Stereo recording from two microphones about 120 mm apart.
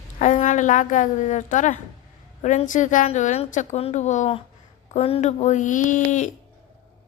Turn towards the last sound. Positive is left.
turn(degrees=85)